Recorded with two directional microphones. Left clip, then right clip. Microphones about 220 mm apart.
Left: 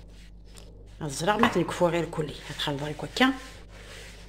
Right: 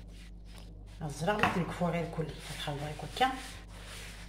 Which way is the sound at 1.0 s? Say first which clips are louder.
Left 6 dB; 55° left (ahead or behind).